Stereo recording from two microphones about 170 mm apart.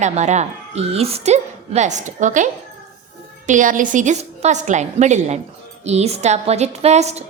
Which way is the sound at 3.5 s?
50° right (ahead or behind).